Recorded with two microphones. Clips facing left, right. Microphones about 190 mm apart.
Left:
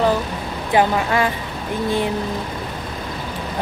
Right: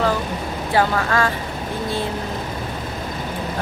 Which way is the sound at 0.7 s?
15° left (ahead or behind).